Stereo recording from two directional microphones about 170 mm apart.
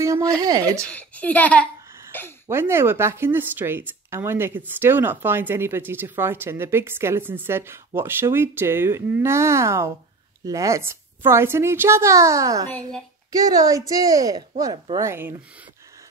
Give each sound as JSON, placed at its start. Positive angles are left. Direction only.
{"t": 0.0, "sound": "a woman's voice", "side_deg": -20}
{"t": 0.8, "sound": "speech", "side_deg": 10}
{"t": 2.4, "sound": "a woman's voice", "side_deg": -15}